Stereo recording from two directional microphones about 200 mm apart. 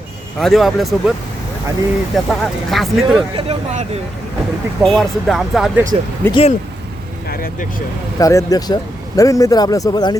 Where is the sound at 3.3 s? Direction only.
30° right (ahead or behind).